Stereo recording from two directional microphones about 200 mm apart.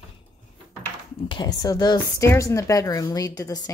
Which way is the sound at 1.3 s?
20° left (ahead or behind).